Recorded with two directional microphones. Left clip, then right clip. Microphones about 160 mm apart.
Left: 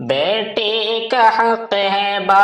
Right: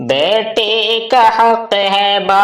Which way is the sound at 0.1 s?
40° right (ahead or behind).